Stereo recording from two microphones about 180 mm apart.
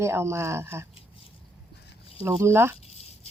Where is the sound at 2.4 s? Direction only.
15° right (ahead or behind).